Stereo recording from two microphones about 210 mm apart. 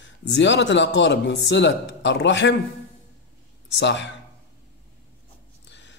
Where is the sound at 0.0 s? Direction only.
60° left (ahead or behind).